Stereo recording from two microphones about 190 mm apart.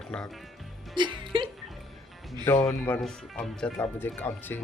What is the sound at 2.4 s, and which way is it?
Speech, 10° left (ahead or behind).